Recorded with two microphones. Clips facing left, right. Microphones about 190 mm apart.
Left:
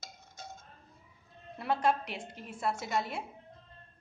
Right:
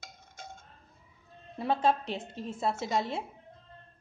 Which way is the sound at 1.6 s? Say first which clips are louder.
Right 2 dB; 25° right (ahead or behind).